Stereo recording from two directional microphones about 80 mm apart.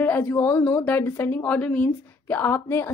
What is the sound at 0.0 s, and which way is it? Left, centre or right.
A woman's voice, left.